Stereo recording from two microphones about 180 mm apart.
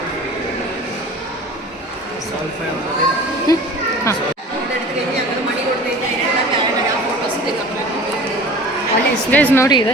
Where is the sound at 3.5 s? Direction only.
20° left (ahead or behind).